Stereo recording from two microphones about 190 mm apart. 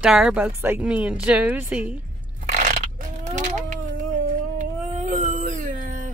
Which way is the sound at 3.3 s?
40° right (ahead or behind).